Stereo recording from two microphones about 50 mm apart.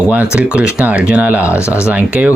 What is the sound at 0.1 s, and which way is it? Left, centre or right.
Speech, right.